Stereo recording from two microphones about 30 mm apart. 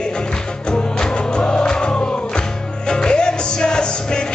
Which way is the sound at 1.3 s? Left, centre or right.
Left.